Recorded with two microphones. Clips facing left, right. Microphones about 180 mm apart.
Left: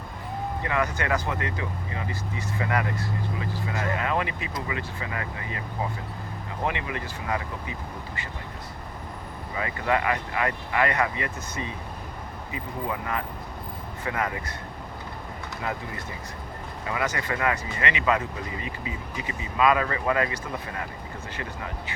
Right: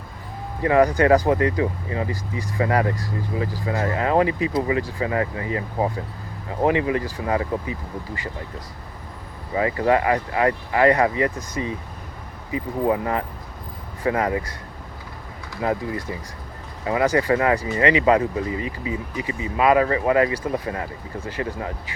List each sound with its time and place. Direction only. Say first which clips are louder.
0.6 s speech: right 12 dB; 35° right (ahead or behind)
7.0 s speech: right 7 dB; 30° right (ahead or behind)
9.6 s speech: right 7 dB; 30° right (ahead or behind)
15.6 s speech: right 10 dB; 30° right (ahead or behind)